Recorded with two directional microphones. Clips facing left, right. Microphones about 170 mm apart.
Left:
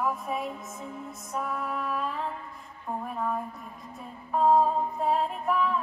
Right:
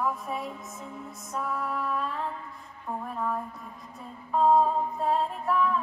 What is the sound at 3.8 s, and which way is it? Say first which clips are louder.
Music: left 1 dB; centre (ahead or behind).